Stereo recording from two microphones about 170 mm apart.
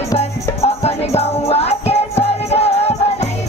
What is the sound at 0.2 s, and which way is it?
Music, 40° left (ahead or behind).